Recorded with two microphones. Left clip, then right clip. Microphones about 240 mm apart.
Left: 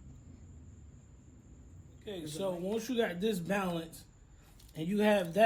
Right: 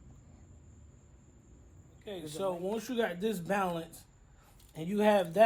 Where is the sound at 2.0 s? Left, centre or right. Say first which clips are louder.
Right 2 dB; right.